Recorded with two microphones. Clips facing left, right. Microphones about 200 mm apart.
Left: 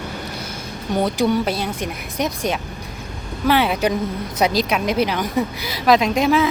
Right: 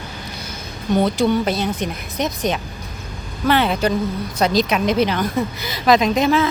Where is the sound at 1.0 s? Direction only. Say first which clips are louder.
Left 1 dB; 10° left (ahead or behind).